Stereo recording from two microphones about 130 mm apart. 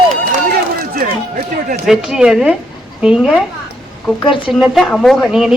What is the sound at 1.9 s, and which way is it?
Speech, 5° right (ahead or behind).